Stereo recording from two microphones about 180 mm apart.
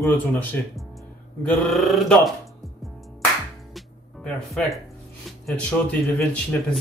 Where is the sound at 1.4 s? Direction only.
Centre (ahead or behind).